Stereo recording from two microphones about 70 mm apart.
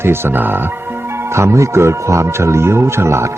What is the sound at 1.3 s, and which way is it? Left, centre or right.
A man's voice, right.